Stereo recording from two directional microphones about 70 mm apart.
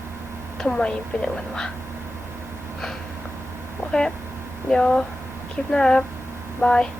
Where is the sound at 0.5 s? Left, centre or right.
Centre.